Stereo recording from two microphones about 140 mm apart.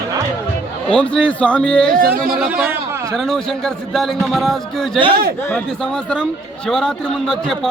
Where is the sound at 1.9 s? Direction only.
90° right.